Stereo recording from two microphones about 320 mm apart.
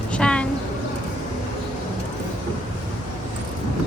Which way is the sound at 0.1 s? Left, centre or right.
Centre.